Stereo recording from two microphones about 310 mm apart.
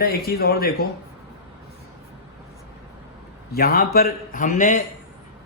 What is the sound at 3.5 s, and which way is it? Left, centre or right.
Speech, left.